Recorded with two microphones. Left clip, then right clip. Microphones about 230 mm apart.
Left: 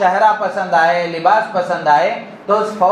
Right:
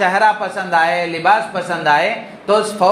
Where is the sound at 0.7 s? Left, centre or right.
Right.